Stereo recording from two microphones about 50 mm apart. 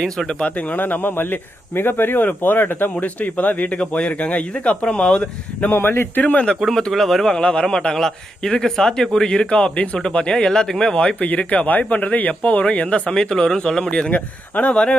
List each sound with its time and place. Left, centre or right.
0.0 s a man's voice: centre
0.4 s speech: left
5.7 s speech: left
6.2 s speech: left
6.7 s speech: centre
7.3 s a man's voice: centre
11.2 s speech: left
14.1 s speech: left
14.7 s a man's voice: centre